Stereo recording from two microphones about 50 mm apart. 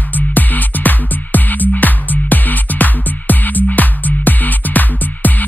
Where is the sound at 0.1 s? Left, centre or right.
Left.